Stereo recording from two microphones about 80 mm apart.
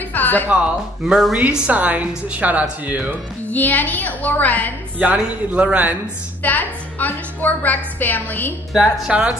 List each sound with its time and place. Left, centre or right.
0.1 s music: left
1.0 s speech: centre
1.7 s speech: centre
3.4 s a woman's voice: left
4.9 s a man's voice: centre
6.4 s a woman's voice: left
8.7 s a man's voice: centre